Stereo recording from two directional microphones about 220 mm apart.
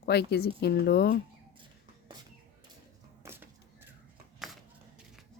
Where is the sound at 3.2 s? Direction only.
10° right (ahead or behind).